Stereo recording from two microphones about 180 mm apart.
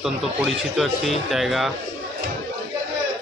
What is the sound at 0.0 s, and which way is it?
Speech, centre (ahead or behind).